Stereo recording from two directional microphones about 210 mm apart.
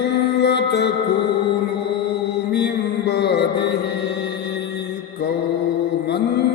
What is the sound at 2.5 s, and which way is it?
Mantra, 50° left (ahead or behind).